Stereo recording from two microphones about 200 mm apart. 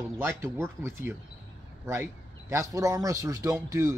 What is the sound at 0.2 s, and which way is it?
Speech, 15° right (ahead or behind).